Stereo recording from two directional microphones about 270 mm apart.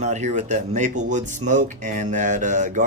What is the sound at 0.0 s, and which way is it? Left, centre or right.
A man's voice, right.